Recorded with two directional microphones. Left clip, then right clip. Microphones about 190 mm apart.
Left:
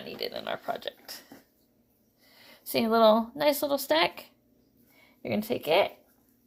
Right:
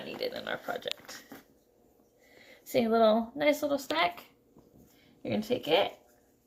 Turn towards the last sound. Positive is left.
turn(degrees=65)  # may be behind; listen again after turning